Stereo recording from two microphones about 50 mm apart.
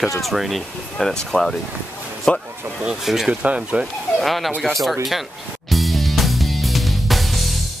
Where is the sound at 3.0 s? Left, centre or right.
Centre.